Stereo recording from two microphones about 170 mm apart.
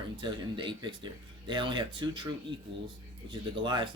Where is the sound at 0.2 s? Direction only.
30° right (ahead or behind).